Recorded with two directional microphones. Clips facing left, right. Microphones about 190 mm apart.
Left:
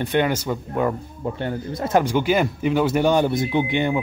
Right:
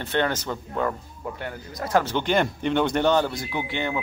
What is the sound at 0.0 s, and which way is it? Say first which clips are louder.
Speech: left 4 dB; 15° left (ahead or behind).